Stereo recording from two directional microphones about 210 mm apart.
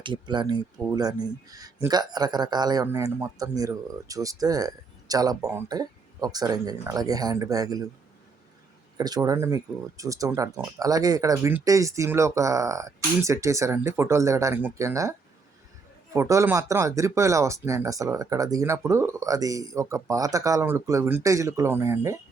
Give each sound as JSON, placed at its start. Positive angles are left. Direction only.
{"t": 0.0, "sound": "speech", "side_deg": -20}
{"t": 9.0, "sound": "speech", "side_deg": -20}
{"t": 16.1, "sound": "speech", "side_deg": -15}